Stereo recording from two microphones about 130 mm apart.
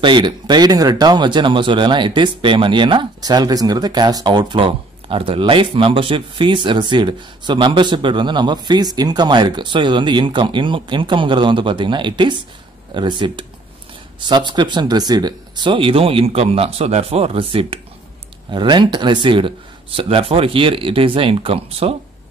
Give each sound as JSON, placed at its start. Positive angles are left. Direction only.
{"t": 0.0, "sound": "speech", "side_deg": -35}